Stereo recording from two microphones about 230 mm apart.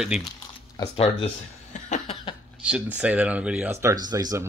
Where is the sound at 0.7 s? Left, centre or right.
Left.